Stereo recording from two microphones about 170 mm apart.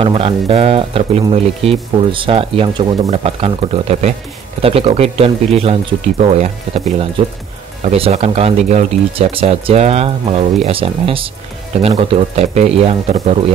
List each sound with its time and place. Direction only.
0.0 s speech: 30° right (ahead or behind)